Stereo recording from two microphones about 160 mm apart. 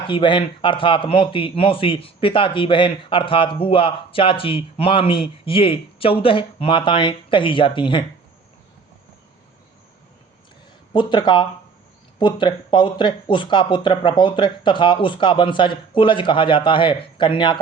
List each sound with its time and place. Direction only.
0.1 s a man's voice: 30° left (ahead or behind)
10.9 s a man's voice: 30° left (ahead or behind)